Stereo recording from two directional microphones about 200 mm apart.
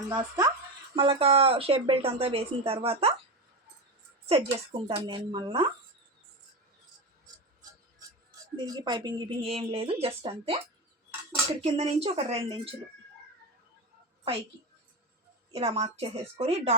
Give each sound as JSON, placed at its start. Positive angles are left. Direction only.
{"t": 0.1, "sound": "a woman's voice", "side_deg": -20}
{"t": 4.3, "sound": "a woman's voice", "side_deg": -30}
{"t": 8.5, "sound": "a woman's voice", "side_deg": -20}
{"t": 11.6, "sound": "a woman's voice", "side_deg": -30}
{"t": 15.6, "sound": "a woman's voice", "side_deg": -30}